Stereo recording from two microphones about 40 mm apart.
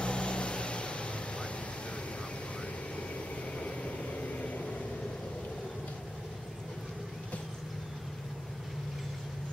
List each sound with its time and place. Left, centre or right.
0.0 s vehicle: left
3.5 s vehicle: left